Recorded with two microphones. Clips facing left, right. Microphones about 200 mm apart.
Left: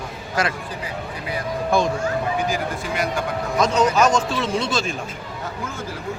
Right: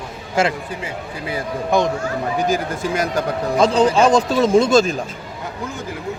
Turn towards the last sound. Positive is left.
turn(degrees=-40)  # may be behind; listen again after turning